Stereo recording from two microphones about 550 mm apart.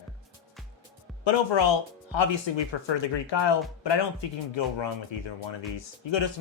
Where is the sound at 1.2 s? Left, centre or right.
Left.